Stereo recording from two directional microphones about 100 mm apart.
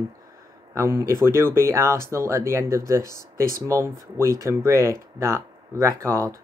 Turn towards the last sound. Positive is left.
turn(degrees=-30)  # may be behind; listen again after turning